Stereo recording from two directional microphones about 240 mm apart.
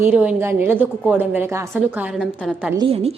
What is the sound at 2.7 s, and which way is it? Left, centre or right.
Speech, right.